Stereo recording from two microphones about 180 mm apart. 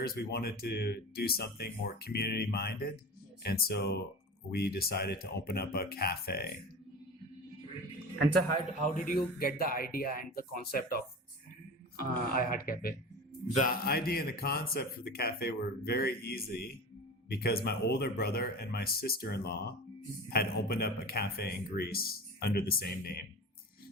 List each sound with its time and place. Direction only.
0.0 s speech: 60° left (ahead or behind)
8.8 s speech: 45° left (ahead or behind)